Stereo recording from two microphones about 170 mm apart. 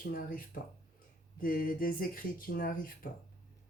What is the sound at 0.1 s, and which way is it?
Speech, 55° left (ahead or behind).